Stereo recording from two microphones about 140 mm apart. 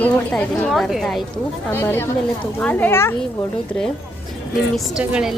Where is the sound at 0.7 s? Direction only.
Centre (ahead or behind).